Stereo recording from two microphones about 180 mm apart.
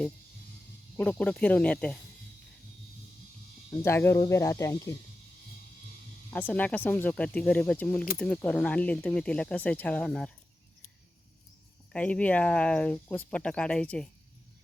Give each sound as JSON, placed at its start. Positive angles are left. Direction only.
{"t": 0.9, "sound": "speech", "side_deg": 5}
{"t": 3.7, "sound": "speech", "side_deg": 15}
{"t": 6.3, "sound": "speech", "side_deg": 10}
{"t": 11.9, "sound": "speech", "side_deg": 5}